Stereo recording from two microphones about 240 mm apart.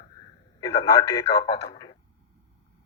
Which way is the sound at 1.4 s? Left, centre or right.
Left.